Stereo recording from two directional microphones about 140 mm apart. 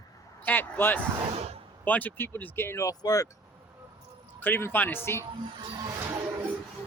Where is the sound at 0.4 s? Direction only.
15° left (ahead or behind).